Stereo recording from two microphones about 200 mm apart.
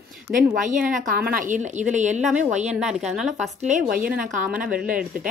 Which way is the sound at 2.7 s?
Centre (ahead or behind).